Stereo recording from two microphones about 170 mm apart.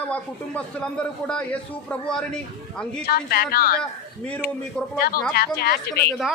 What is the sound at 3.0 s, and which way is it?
Speech, 65° left (ahead or behind).